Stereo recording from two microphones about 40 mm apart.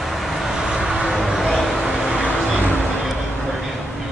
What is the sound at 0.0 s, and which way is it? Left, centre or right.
Vehicle, centre.